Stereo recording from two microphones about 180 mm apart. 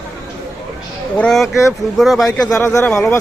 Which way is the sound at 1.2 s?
Centre (ahead or behind).